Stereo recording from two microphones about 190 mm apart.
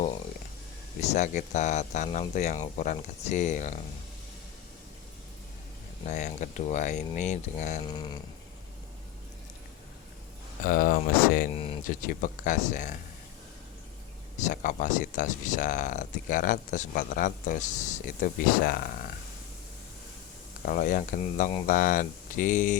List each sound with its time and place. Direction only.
1.0 s speech: 40° left (ahead or behind)
6.1 s speech: 40° left (ahead or behind)
7.9 s a sound: 20° left (ahead or behind)
10.7 s speech: 50° left (ahead or behind)
11.5 s speech: 30° left (ahead or behind)
11.8 s speech: 45° left (ahead or behind)
14.3 s speech: 40° left (ahead or behind)
20.7 s speech: 45° left (ahead or behind)